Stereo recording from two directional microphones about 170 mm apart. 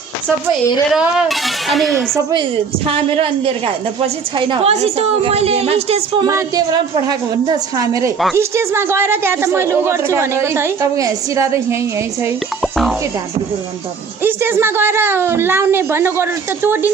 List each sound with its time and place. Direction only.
0.9 s speech: 5° right (ahead or behind)
2.8 s a woman's voice: 30° right (ahead or behind)
6.2 s a woman's voice: 20° right (ahead or behind)
14.2 s speech: 10° right (ahead or behind)